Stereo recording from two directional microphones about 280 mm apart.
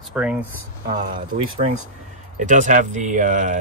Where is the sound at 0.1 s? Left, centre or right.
Centre.